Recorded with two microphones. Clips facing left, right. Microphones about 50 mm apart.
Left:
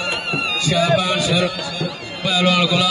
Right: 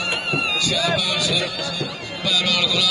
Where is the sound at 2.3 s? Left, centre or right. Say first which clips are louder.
Left 5 dB; left.